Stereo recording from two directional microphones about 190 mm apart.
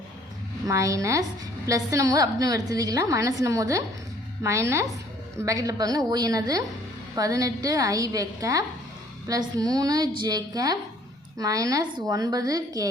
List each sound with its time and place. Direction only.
0.7 s a woman's voice: 15° right (ahead or behind)